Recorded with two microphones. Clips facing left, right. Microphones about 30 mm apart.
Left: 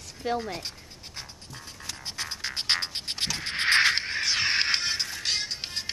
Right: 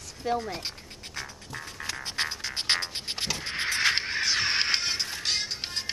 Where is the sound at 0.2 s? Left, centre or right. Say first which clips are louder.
Even; left.